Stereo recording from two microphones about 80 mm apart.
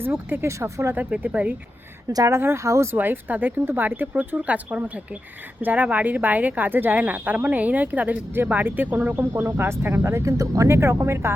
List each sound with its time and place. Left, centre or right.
0.0 s speech: right
0.9 s speech: centre
2.0 s a woman's voice: right
2.4 s speech: right
2.9 s speech: right
9.3 s speech: right